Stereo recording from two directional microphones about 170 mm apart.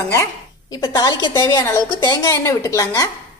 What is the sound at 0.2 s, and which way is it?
Speech, 20° left (ahead or behind).